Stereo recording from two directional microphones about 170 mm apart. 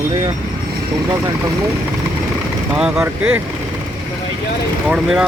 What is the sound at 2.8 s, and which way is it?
Speech, 5° right (ahead or behind).